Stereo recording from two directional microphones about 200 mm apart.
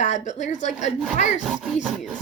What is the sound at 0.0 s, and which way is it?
Speech, 35° left (ahead or behind).